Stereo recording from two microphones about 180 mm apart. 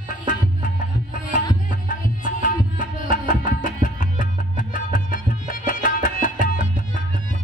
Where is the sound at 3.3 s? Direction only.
50° left (ahead or behind).